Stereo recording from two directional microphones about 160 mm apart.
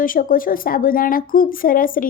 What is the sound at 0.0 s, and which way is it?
A woman's voice, 60° left (ahead or behind).